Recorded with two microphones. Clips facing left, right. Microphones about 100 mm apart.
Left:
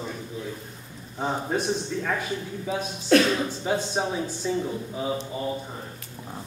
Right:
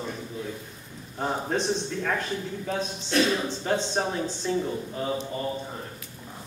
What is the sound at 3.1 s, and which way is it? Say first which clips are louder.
Speech: left 6 dB; 65° left (ahead or behind).